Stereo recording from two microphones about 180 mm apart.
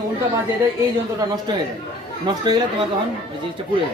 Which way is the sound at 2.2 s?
25° right (ahead or behind).